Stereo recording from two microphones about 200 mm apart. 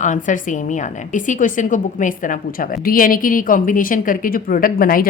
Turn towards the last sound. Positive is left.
turn(degrees=45)  # may be behind; listen again after turning